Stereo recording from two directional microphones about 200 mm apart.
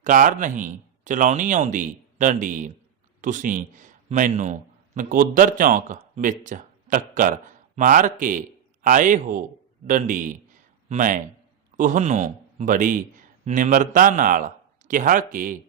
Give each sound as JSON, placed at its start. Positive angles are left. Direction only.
{"t": 0.0, "sound": "a man's voice", "side_deg": -40}